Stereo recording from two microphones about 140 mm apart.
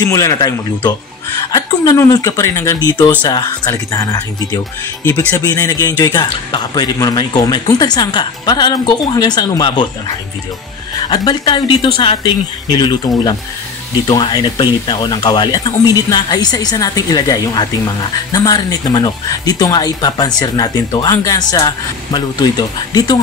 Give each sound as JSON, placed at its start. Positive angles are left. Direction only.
{"t": 0.0, "sound": "speech", "side_deg": 25}
{"t": 11.1, "sound": "speech", "side_deg": 30}